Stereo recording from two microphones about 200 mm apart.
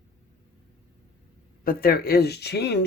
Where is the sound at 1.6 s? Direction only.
45° left (ahead or behind).